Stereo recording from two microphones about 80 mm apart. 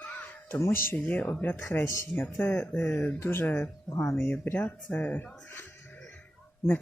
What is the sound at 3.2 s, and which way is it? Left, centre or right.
Speech, left.